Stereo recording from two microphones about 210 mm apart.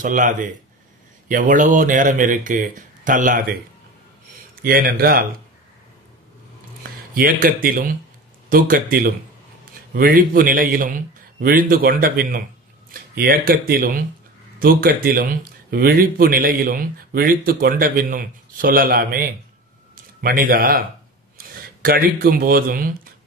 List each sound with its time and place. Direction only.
0.0 s speech: 35° right (ahead or behind)
7.2 s speech: 40° right (ahead or behind)
21.8 s speech: 45° right (ahead or behind)